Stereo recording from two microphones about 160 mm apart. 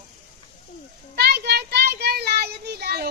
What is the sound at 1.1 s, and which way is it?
Child singing, 85° right.